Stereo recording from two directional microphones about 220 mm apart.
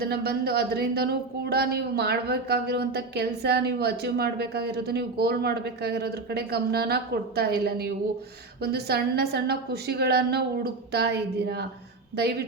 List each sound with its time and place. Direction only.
0.0 s speech: 45° right (ahead or behind)